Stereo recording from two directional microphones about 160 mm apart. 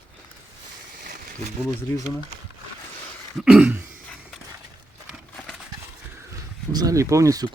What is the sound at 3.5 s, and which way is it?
Throat clearing, 10° right (ahead or behind).